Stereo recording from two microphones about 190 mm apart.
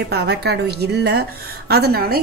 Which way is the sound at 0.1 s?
60° right (ahead or behind).